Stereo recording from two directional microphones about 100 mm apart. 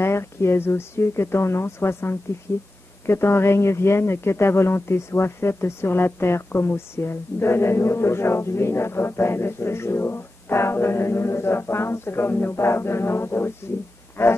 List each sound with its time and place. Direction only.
0.0 s speech: 25° left (ahead or behind)